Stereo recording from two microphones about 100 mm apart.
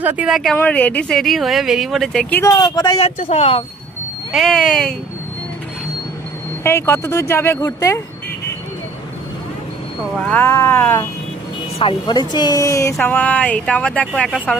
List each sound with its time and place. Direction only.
0.0 s speech: 15° right (ahead or behind)
0.3 s speech: centre (ahead or behind)
0.5 s speech: 15° left (ahead or behind)
2.4 s speech: 35° left (ahead or behind)
3.0 s speech: 90° left
4.3 s speech: centre (ahead or behind)
6.6 s speech: 25° left (ahead or behind)
10.2 s speech: 20° left (ahead or behind)
10.5 s speech: 30° left (ahead or behind)
11.8 s speech: 65° left (ahead or behind)
12.1 s speech: 45° left (ahead or behind)
13.0 s speech: 15° left (ahead or behind)